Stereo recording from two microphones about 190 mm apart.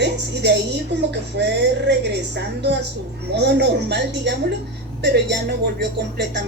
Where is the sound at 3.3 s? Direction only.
65° right (ahead or behind).